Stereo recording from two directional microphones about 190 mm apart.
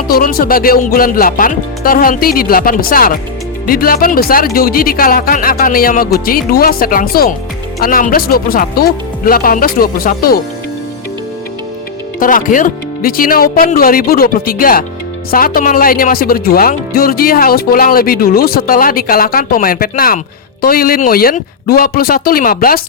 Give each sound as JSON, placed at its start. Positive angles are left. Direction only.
{"t": 0.1, "sound": "speech", "side_deg": 50}
{"t": 12.2, "sound": "speech", "side_deg": 45}